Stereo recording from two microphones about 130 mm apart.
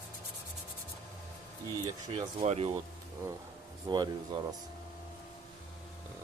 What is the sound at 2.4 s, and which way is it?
Speech, 55° right (ahead or behind).